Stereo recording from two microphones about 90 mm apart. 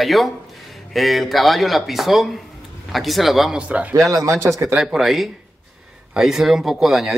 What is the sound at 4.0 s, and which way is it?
Speech, 35° right (ahead or behind).